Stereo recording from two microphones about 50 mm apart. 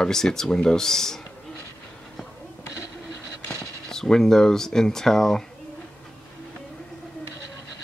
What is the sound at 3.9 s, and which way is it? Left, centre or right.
Speech, centre.